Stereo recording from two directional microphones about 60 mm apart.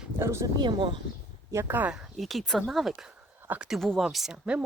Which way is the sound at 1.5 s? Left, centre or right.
Right.